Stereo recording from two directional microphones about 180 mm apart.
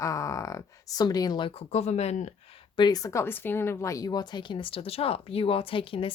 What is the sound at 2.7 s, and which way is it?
Speech, 20° left (ahead or behind).